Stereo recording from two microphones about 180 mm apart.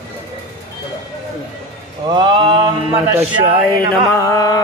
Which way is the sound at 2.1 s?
25° right (ahead or behind).